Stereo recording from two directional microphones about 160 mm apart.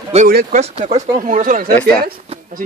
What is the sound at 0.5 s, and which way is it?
Speech, 40° right (ahead or behind).